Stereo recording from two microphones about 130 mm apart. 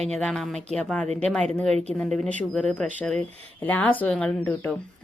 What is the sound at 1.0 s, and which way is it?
Speech, 60° right (ahead or behind).